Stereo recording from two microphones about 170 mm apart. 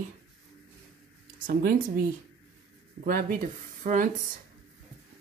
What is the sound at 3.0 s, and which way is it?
Speech, 55° right (ahead or behind).